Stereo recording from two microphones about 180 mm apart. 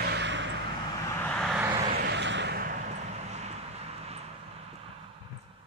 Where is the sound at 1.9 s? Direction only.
65° right (ahead or behind).